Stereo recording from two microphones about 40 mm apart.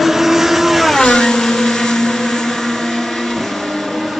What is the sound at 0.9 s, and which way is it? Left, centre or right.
Vehicle, centre.